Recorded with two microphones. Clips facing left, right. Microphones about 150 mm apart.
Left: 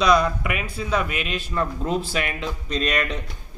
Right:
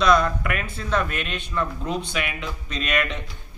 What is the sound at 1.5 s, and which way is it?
Speech, 35° left (ahead or behind).